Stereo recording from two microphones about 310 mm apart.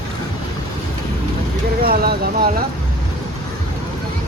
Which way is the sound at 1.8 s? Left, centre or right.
Right.